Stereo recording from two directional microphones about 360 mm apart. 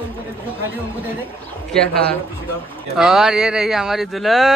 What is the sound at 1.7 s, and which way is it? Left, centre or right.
Speech, centre.